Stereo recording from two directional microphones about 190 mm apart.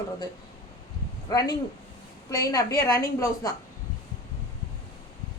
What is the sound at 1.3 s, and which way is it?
A woman's voice, 20° left (ahead or behind).